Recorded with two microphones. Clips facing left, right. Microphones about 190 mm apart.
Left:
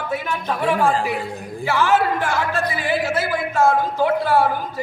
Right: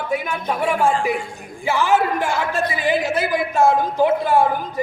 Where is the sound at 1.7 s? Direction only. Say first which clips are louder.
Even; 15° right (ahead or behind).